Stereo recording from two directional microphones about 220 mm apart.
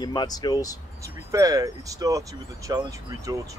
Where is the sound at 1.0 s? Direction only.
15° right (ahead or behind).